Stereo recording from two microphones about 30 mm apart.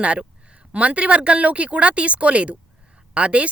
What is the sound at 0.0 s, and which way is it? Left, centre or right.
Speech, right.